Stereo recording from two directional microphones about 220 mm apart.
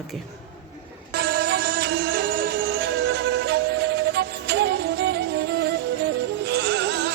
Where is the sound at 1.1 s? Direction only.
45° right (ahead or behind).